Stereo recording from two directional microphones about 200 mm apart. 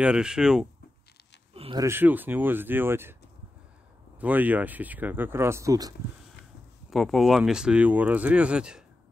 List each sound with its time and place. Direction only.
0.0 s speech: 5° right (ahead or behind)
1.5 s a sound: 30° right (ahead or behind)
1.8 s speech: 10° right (ahead or behind)
4.2 s speech: 10° right (ahead or behind)
6.9 s speech: centre (ahead or behind)